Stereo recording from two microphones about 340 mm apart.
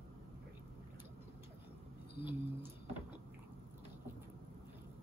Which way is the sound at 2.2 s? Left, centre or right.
Centre.